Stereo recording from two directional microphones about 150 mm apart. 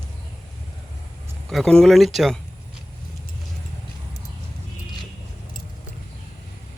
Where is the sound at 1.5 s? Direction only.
5° left (ahead or behind).